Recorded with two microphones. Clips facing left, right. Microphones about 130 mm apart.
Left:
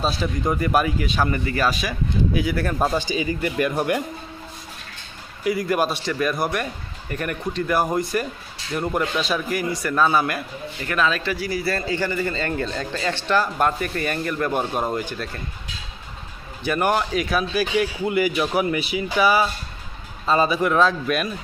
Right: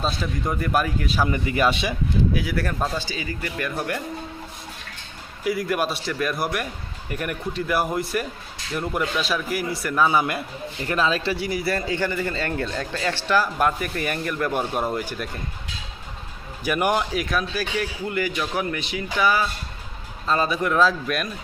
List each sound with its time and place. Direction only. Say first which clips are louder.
0.0 s a man's voice: left 3 dB; centre (ahead or behind); by 2.0 s 25° right (ahead or behind)
2.3 s a man's voice: left 2 dB; centre (ahead or behind)
2.7 s speech: left 5 dB; 15° left (ahead or behind)
5.4 s a man's voice: left 2 dB; centre (ahead or behind); by 10.4 s 20° right (ahead or behind)
10.8 s speech: even; 30° right (ahead or behind)
11.9 s speech: left 1 dB; 10° left (ahead or behind)
12.6 s a man's voice: left 1 dB; 5° right (ahead or behind)
14.7 s speech: left 1 dB; 20° left (ahead or behind)
14.9 s speech: left 1 dB; 10° right (ahead or behind)
16.6 s speech: left 1 dB; 10° right (ahead or behind)
17.5 s a man's voice: left 5 dB; 15° left (ahead or behind)